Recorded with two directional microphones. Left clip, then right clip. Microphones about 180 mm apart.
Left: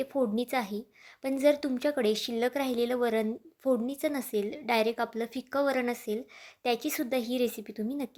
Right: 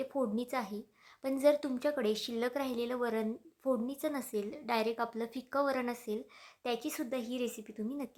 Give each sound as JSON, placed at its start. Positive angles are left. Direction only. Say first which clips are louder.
{"t": 0.0, "sound": "a woman's voice", "louder": "left 5 dB", "side_deg": 15}